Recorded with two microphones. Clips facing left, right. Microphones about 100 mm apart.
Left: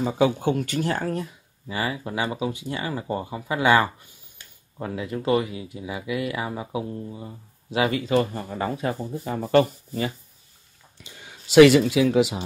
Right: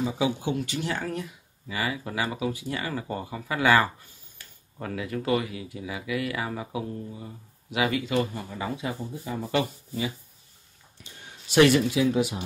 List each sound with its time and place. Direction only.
0.0 s speech: 50° left (ahead or behind)
1.7 s speech: 30° left (ahead or behind); by 10.1 s 50° left (ahead or behind)
11.1 s speech: 90° left